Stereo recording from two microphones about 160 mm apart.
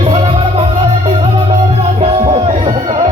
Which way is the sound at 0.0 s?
35° right (ahead or behind).